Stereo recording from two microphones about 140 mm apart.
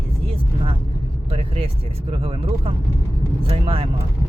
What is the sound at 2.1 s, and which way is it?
Speech, 40° right (ahead or behind).